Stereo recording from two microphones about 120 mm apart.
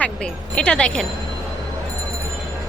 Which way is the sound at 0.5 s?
10° left (ahead or behind).